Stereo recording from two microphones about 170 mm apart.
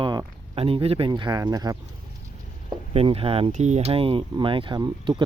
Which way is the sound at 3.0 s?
35° right (ahead or behind).